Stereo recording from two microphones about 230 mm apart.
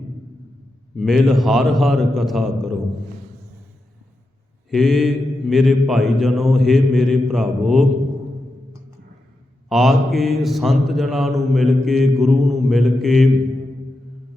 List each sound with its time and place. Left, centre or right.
0.9 s a man's voice: centre
4.7 s a man's voice: centre
9.6 s a man's voice: centre